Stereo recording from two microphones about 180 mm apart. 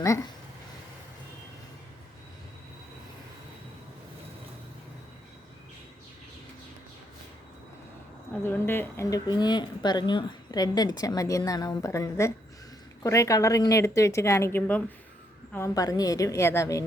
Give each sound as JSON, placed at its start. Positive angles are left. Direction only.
{"t": 8.3, "sound": "speech", "side_deg": 10}